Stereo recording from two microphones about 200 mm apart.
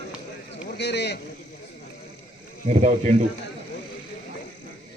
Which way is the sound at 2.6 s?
35° right (ahead or behind).